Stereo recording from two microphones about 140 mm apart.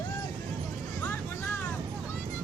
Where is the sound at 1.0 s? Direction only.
15° left (ahead or behind).